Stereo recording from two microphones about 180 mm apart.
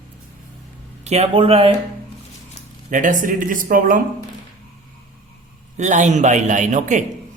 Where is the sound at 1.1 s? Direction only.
30° right (ahead or behind).